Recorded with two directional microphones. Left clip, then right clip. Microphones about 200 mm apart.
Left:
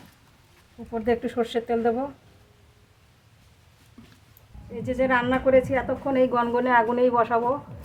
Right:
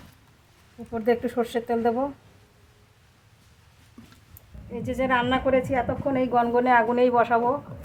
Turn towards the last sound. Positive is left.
turn(degrees=-10)  # may be behind; listen again after turning